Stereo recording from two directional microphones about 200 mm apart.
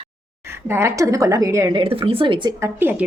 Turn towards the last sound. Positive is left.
turn(degrees=-10)  # may be behind; listen again after turning